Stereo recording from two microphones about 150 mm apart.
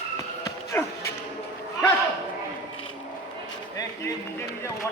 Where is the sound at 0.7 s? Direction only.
15° left (ahead or behind).